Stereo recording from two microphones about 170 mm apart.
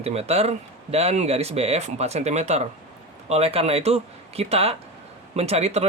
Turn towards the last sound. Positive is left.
turn(degrees=-40)  # may be behind; listen again after turning